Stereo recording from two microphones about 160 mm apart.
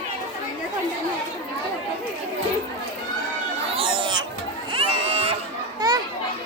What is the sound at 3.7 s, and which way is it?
Chatter, 30° right (ahead or behind).